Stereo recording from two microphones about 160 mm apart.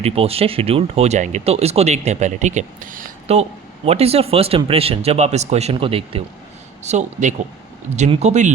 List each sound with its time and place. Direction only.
0.0 s speech: 40° right (ahead or behind); by 3.1 s 55° right (ahead or behind)
3.3 s speech: 40° right (ahead or behind)
6.8 s speech: 50° right (ahead or behind)